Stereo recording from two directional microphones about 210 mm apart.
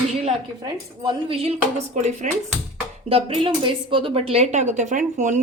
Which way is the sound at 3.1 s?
25° right (ahead or behind).